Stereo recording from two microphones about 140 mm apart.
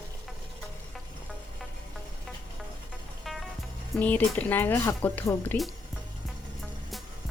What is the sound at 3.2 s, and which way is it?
Music, centre (ahead or behind).